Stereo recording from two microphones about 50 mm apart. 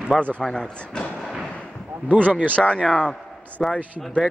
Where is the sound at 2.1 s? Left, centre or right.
Right.